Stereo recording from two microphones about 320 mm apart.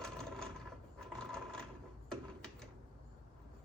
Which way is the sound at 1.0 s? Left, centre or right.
Centre.